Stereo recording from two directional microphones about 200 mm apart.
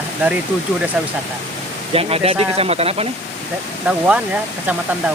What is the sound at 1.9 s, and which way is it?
Speech, 30° right (ahead or behind).